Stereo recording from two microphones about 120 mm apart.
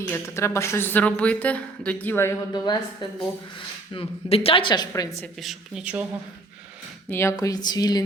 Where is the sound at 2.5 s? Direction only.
35° left (ahead or behind).